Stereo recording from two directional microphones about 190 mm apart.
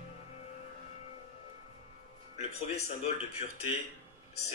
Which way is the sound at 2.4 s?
35° left (ahead or behind).